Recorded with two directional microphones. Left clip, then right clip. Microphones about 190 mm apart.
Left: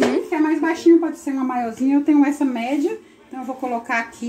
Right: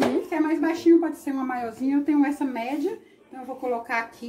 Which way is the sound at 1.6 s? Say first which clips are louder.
Left 6 dB; 30° left (ahead or behind).